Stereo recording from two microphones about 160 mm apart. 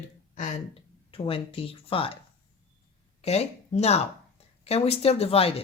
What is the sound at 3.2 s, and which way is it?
Speech, 40° left (ahead or behind).